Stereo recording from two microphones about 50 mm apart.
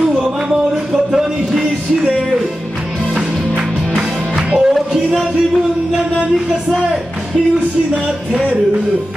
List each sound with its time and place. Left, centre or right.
0.9 s music: centre
7.9 s music: right